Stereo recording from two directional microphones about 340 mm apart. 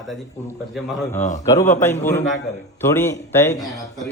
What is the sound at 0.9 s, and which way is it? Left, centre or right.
Speech, centre.